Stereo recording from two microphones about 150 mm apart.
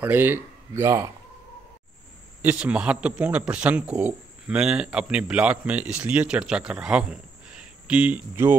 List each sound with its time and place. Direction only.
0.0 s speech: 15° right (ahead or behind)
2.4 s a man's voice: 10° right (ahead or behind)